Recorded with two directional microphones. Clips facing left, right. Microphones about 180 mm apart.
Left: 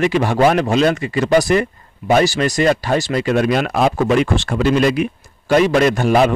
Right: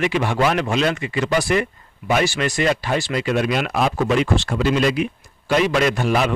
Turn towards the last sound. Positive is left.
turn(degrees=45)  # may be behind; listen again after turning